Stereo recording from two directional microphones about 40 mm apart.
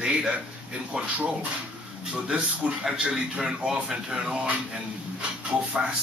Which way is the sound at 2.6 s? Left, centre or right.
Right.